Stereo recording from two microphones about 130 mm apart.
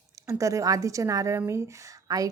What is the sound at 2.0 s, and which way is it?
Whispering, 30° right (ahead or behind).